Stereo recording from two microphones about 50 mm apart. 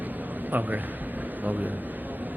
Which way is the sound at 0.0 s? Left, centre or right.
Right.